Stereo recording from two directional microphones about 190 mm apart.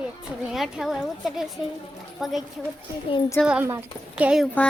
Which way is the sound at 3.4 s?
10° right (ahead or behind).